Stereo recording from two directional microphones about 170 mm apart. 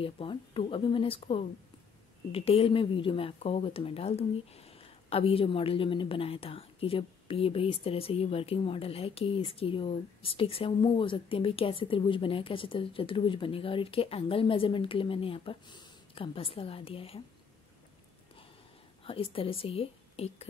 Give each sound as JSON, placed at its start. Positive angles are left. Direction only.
{"t": 0.0, "sound": "speech", "side_deg": 30}
{"t": 19.3, "sound": "speech", "side_deg": 35}